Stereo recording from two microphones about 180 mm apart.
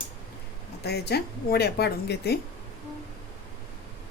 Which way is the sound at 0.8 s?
65° left (ahead or behind).